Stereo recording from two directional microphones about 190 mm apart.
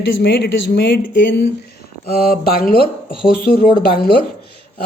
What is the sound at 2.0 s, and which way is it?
Speech, 55° left (ahead or behind).